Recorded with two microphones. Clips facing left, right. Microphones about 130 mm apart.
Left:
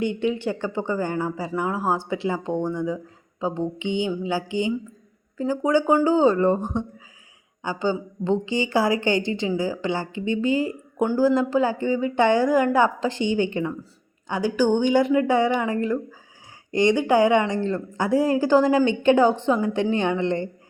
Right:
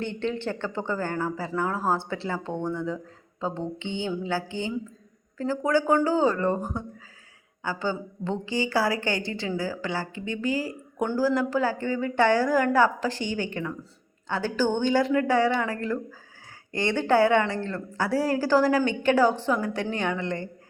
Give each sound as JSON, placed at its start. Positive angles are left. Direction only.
{"t": 0.0, "sound": "speech", "side_deg": 10}